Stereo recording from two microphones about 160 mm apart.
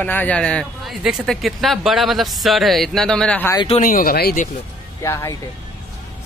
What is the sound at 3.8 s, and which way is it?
Speech, 60° left (ahead or behind).